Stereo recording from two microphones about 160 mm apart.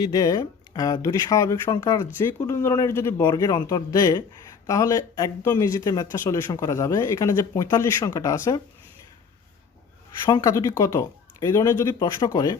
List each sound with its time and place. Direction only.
0.0 s a man's voice: 25° left (ahead or behind)
10.2 s speech: 25° left (ahead or behind)